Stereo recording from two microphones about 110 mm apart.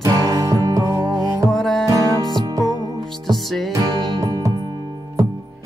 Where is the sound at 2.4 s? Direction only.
35° right (ahead or behind).